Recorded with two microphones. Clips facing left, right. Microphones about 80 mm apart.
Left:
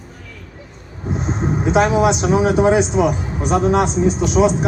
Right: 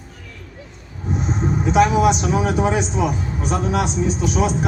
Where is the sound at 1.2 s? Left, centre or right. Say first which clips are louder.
Left 2 dB; left.